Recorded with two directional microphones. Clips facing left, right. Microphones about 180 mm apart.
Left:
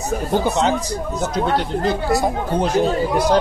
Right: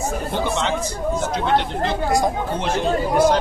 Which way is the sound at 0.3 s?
40° left (ahead or behind).